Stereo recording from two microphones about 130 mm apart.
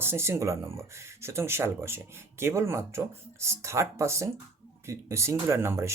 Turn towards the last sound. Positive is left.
turn(degrees=-20)  # may be behind; listen again after turning